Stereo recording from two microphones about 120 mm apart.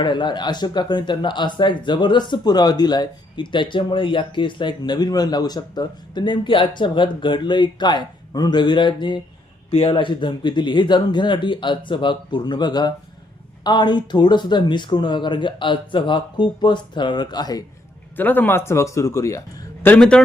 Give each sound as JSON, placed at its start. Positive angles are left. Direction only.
{"t": 0.0, "sound": "speech", "side_deg": 40}
{"t": 18.2, "sound": "a man's voice", "side_deg": 15}
{"t": 20.0, "sound": "a man's voice", "side_deg": 5}